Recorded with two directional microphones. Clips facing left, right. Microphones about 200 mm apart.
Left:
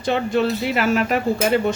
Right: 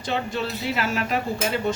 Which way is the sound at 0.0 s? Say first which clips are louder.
Left 7 dB; 60° left (ahead or behind).